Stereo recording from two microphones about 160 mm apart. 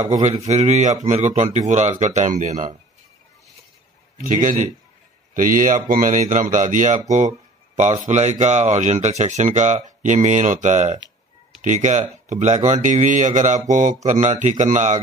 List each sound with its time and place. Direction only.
0.1 s speech: 45° right (ahead or behind)
4.2 s a man's voice: 55° right (ahead or behind)